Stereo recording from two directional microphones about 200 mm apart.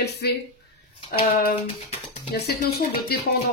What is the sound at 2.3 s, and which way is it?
Speech, 55° left (ahead or behind).